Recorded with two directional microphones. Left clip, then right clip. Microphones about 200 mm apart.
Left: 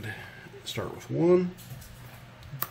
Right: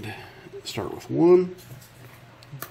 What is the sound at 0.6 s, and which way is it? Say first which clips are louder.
Speech: right 3 dB; 15° right (ahead or behind).